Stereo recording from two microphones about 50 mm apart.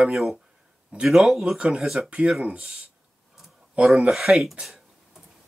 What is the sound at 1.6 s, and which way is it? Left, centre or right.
Speech, centre.